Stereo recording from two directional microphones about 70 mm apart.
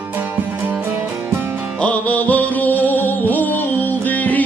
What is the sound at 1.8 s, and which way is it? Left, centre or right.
Music, left.